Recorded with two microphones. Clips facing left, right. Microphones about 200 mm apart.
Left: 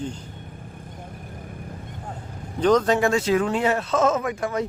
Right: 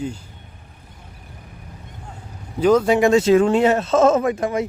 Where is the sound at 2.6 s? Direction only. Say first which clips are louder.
Right 4 dB; 10° right (ahead or behind).